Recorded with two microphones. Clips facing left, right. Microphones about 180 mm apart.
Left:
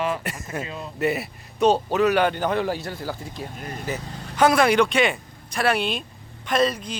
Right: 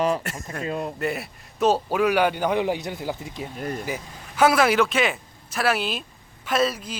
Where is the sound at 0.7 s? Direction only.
60° right (ahead or behind).